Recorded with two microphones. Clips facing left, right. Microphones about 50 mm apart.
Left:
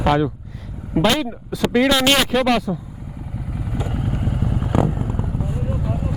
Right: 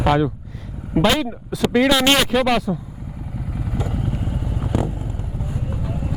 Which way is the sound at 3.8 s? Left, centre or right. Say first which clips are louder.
Left 1 dB; centre.